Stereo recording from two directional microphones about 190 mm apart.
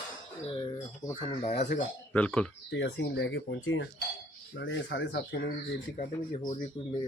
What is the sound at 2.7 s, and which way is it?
Speech, 70° left (ahead or behind).